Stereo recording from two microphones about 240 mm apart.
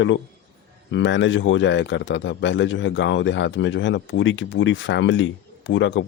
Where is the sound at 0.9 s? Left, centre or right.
Left.